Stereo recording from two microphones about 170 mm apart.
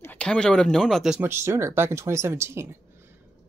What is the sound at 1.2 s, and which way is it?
Speech, 15° right (ahead or behind).